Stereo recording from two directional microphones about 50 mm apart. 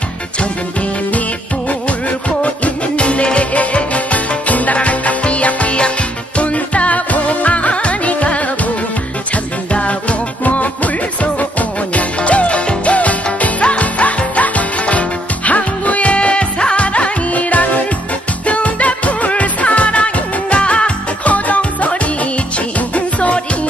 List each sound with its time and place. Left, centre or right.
2.4 s music: left
11.9 s music: left